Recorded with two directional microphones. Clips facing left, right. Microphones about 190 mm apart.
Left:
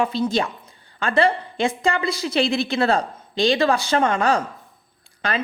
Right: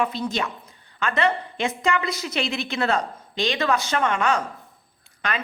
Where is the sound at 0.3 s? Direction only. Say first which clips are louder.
Left 5 dB; 30° left (ahead or behind).